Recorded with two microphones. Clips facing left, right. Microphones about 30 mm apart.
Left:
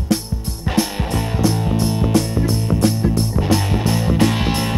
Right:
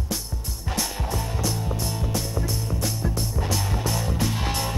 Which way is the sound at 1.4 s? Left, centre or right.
Left.